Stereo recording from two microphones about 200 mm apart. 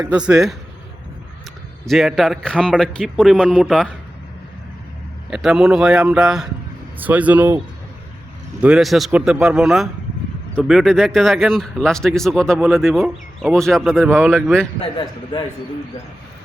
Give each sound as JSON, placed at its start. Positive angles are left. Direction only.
{"t": 0.1, "sound": "speech", "side_deg": -5}
{"t": 1.8, "sound": "speech", "side_deg": 0}
{"t": 5.3, "sound": "speech", "side_deg": -5}
{"t": 8.6, "sound": "speech", "side_deg": -5}
{"t": 14.8, "sound": "a man's voice", "side_deg": 25}